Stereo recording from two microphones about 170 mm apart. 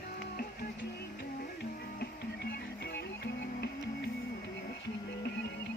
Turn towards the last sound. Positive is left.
turn(degrees=90)